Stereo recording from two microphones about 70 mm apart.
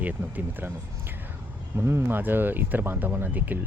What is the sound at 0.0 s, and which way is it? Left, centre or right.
Speech, right.